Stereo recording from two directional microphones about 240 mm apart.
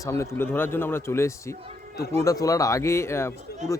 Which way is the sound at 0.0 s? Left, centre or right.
Centre.